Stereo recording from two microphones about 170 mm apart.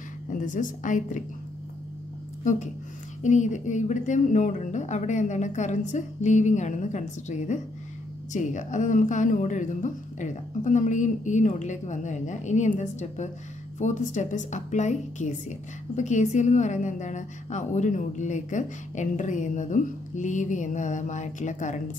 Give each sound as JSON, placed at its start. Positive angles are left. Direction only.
{"t": 0.3, "sound": "a woman's voice", "side_deg": 50}
{"t": 3.2, "sound": "a woman's voice", "side_deg": 45}